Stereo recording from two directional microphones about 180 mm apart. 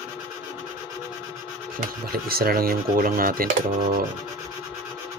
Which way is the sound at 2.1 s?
55° right (ahead or behind).